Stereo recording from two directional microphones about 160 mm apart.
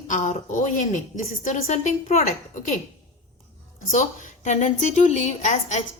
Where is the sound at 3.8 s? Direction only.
55° left (ahead or behind).